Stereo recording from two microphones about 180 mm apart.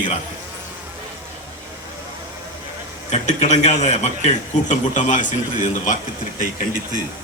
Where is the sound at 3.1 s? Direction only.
40° left (ahead or behind).